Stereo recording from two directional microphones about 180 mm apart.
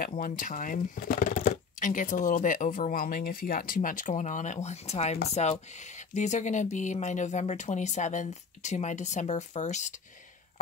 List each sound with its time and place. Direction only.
0.0 s speech: 50° left (ahead or behind)